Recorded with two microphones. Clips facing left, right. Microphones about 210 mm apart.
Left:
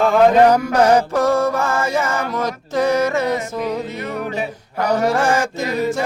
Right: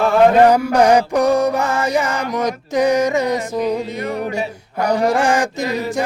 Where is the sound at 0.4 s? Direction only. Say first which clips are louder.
Right 1 dB; 10° right (ahead or behind).